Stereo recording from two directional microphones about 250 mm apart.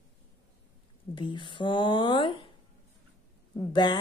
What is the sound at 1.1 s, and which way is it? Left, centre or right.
Speech, centre.